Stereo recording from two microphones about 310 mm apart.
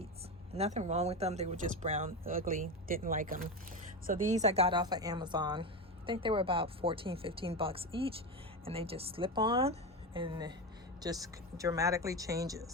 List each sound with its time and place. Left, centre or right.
0.5 s speech: right